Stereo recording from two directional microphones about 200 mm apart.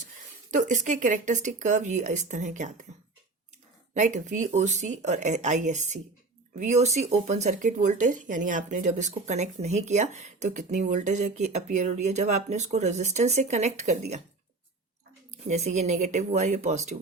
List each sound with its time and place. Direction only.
0.5 s speech: 40° right (ahead or behind)
3.9 s speech: 40° right (ahead or behind)
15.3 s speech: 35° right (ahead or behind)